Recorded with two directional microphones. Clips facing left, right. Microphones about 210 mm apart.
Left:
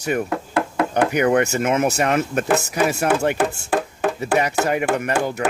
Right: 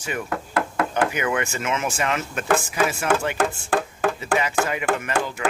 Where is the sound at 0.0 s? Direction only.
45° left (ahead or behind).